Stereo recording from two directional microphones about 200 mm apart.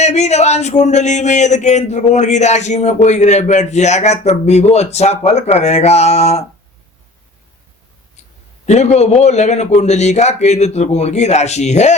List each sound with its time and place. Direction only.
0.0 s speech: 35° left (ahead or behind)
8.6 s speech: 35° left (ahead or behind)